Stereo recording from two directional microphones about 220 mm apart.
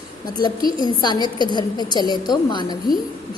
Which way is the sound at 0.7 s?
20° left (ahead or behind).